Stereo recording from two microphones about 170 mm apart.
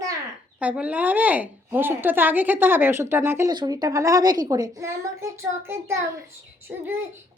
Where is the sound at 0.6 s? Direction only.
10° right (ahead or behind).